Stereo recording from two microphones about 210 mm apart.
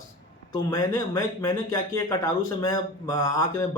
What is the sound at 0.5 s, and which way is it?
Speech, 15° left (ahead or behind).